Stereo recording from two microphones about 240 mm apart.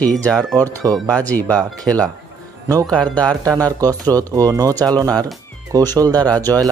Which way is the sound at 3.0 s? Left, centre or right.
Centre.